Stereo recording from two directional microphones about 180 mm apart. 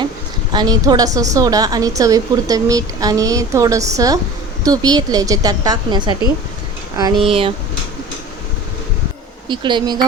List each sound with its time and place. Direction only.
0.5 s speech: 25° right (ahead or behind)
9.5 s speech: 25° right (ahead or behind)